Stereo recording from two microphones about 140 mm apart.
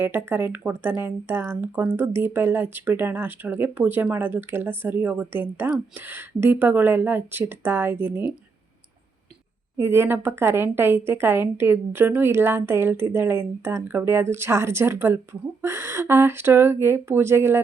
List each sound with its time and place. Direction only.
0.0 s speech: 15° right (ahead or behind)
9.7 s speech: 15° right (ahead or behind)